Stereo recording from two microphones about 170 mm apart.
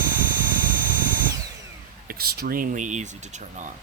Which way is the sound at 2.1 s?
65° right (ahead or behind).